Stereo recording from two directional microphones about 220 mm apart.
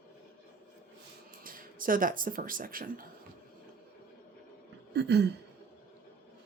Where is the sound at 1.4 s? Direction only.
40° right (ahead or behind).